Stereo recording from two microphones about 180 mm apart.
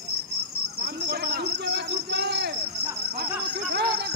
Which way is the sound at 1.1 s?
65° right (ahead or behind).